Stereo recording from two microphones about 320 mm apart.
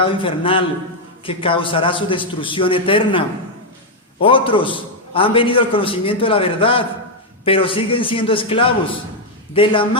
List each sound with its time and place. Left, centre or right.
0.0 s a man's voice: centre